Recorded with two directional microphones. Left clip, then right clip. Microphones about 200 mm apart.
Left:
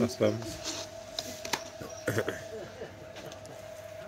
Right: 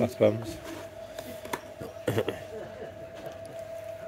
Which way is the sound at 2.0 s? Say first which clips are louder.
Right 2 dB; 15° right (ahead or behind).